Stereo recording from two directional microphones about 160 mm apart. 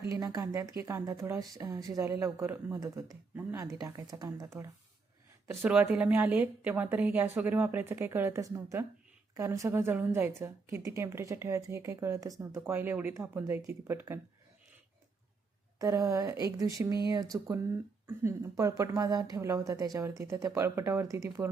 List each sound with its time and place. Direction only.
0.1 s a woman's voice: 20° right (ahead or behind)
15.8 s speech: 20° right (ahead or behind)